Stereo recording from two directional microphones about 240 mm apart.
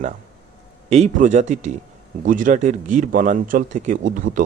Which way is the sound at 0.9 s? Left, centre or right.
Right.